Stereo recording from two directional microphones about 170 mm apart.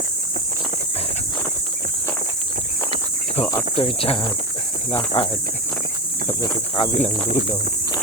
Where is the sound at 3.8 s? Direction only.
35° left (ahead or behind).